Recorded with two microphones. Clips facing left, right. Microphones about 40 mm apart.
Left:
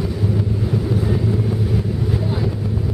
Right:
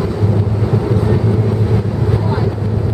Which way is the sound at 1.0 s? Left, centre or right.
Right.